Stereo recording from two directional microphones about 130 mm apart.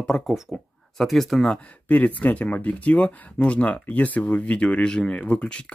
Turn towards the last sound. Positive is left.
turn(degrees=10)  # may be behind; listen again after turning